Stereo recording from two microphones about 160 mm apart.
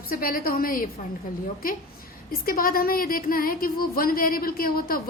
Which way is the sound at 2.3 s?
65° left (ahead or behind).